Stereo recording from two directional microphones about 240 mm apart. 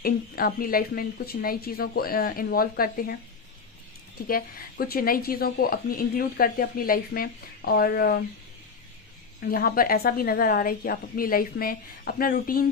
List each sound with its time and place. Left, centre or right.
0.0 s a woman's voice: left
4.3 s a woman's voice: left
9.4 s a woman's voice: left